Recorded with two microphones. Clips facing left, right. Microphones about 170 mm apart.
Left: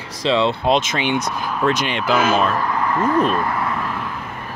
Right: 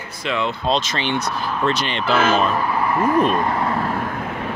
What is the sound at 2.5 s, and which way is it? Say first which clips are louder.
Speech: even; 10° right (ahead or behind).